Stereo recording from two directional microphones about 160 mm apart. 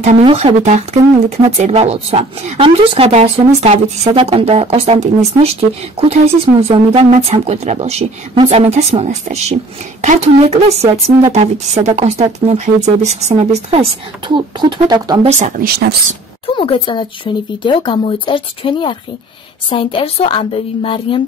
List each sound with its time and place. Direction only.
0.0 s speech: 40° right (ahead or behind); by 15.1 s 25° right (ahead or behind)
15.2 s speech: 45° right (ahead or behind)
16.4 s speech: 35° left (ahead or behind)